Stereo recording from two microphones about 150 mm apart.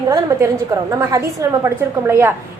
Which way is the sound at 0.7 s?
20° right (ahead or behind).